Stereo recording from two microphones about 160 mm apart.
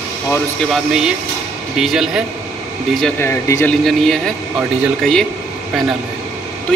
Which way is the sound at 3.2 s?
15° left (ahead or behind).